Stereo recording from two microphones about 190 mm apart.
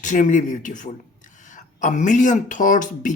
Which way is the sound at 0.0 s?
40° left (ahead or behind).